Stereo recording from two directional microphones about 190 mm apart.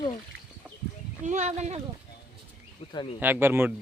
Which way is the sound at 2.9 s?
25° left (ahead or behind).